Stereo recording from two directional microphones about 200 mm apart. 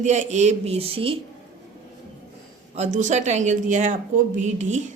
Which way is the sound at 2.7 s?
35° right (ahead or behind).